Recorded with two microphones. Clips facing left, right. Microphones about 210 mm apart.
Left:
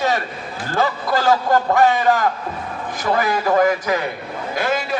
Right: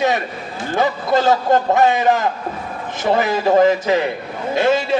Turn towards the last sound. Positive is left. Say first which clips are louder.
# right 5 dB
turn(degrees=-25)  # may be behind; listen again after turning